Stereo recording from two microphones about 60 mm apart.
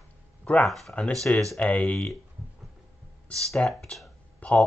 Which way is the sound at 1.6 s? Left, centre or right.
Left.